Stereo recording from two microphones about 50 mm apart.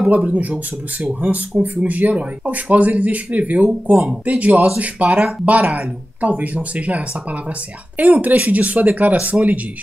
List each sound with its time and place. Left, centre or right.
0.1 s speech: right
8.0 s speech: right